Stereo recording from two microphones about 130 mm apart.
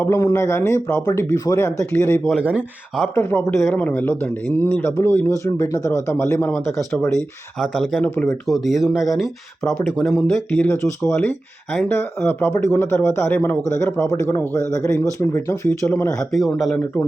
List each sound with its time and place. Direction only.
0.0 s speech: 25° left (ahead or behind)
2.4 s speech: 10° right (ahead or behind)
3.2 s speech: 15° left (ahead or behind)
7.6 s speech: centre (ahead or behind)
8.0 s speech: 15° left (ahead or behind)
8.4 s speech: centre (ahead or behind)
10.5 s speech: 10° left (ahead or behind)
16.1 s speech: 5° left (ahead or behind)
16.7 s speech: 15° left (ahead or behind)